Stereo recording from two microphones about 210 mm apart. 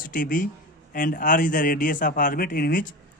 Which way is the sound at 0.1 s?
40° left (ahead or behind).